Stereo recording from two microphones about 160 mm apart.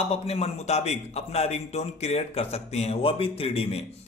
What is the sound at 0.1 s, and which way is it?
A man's voice, 40° left (ahead or behind).